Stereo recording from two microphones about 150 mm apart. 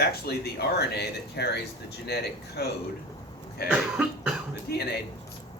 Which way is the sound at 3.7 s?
5° right (ahead or behind).